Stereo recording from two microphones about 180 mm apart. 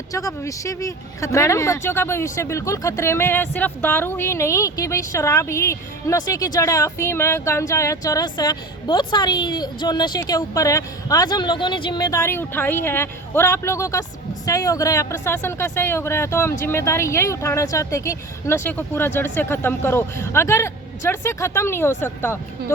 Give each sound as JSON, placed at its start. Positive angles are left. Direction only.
{"t": 0.1, "sound": "speech", "side_deg": 20}